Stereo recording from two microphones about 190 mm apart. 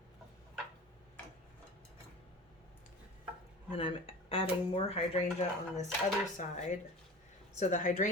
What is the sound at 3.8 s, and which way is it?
Speech, 30° left (ahead or behind).